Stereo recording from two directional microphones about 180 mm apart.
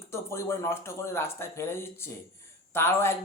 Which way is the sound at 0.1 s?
15° left (ahead or behind).